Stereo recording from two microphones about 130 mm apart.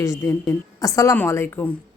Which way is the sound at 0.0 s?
25° left (ahead or behind).